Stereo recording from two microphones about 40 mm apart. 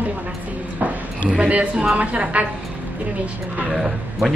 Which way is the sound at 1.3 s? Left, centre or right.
Right.